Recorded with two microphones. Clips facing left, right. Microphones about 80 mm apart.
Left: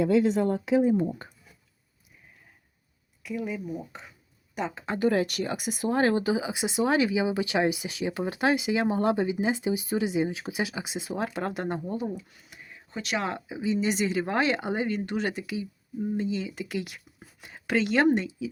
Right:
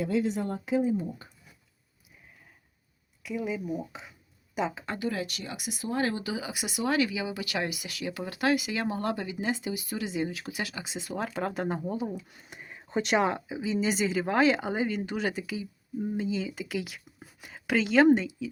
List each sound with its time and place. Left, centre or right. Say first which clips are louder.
0.0 s speech: left 6 dB; left
3.2 s speech: even; centre
4.9 s speech: left 11 dB; left
6.3 s speech: left 6 dB; left
11.2 s speech: even; centre
12.4 s a sound: right 3 dB; right
13.2 s speech: even; centre